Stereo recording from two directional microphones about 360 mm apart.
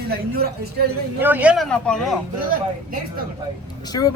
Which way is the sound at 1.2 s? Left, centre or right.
Centre.